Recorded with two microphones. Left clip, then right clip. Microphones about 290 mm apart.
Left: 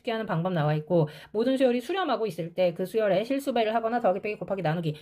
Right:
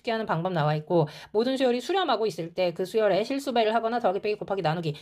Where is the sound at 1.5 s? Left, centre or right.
Right.